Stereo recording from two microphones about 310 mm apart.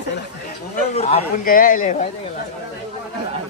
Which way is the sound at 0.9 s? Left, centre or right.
Centre.